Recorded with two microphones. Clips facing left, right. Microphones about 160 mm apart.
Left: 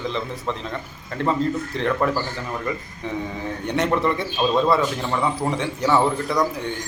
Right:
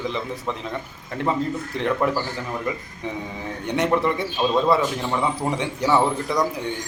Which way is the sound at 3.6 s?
15° right (ahead or behind).